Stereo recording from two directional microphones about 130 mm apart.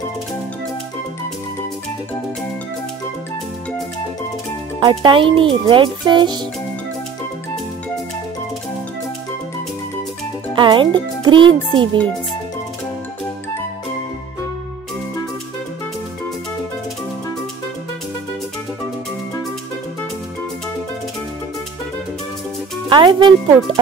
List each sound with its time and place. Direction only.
4.8 s a child's voice: 40° right (ahead or behind)
10.5 s a child's voice: 35° right (ahead or behind)
22.8 s a child's voice: 35° right (ahead or behind)